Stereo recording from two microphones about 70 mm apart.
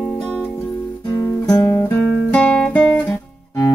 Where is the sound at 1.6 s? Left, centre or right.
Left.